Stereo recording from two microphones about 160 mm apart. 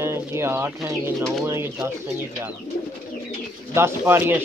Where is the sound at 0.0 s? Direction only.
15° right (ahead or behind).